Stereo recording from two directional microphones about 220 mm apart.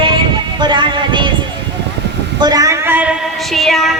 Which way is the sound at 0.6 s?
20° right (ahead or behind).